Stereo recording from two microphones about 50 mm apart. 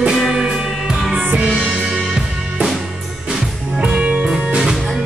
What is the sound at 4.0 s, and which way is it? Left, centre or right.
Music, right.